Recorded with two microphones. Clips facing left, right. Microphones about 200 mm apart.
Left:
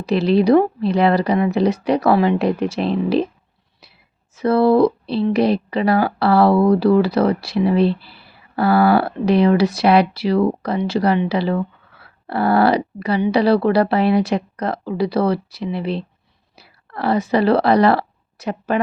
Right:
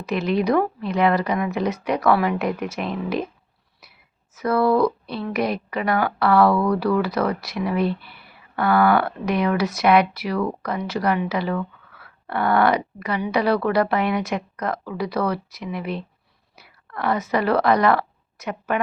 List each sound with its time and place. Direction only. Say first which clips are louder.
0.0 s a woman's voice: left 6 dB; 30° left (ahead or behind)
4.4 s a woman's voice: left 5 dB; 30° left (ahead or behind)